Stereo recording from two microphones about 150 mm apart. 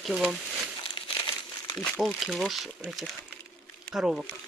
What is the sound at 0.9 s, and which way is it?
Crumpling, 35° left (ahead or behind).